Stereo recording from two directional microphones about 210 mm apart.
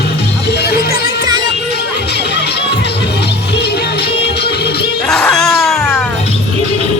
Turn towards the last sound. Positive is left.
turn(degrees=0)  # may be behind; listen again after turning